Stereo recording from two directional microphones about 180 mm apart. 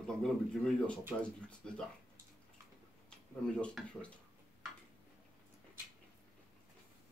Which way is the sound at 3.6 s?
5° left (ahead or behind).